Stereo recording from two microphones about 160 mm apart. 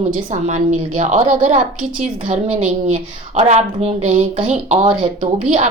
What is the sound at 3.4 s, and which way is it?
Speech, 40° right (ahead or behind).